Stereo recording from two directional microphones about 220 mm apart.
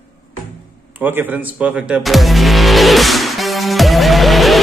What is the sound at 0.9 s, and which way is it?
Music, 10° right (ahead or behind).